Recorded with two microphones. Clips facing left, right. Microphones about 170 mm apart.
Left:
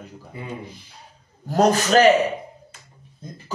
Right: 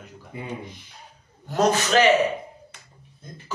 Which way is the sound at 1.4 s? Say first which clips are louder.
Left 3 dB; 35° left (ahead or behind).